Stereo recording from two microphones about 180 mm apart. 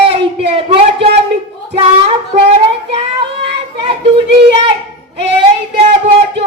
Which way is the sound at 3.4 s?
30° right (ahead or behind).